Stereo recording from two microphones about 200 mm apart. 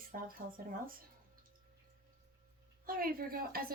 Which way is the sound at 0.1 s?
45° right (ahead or behind).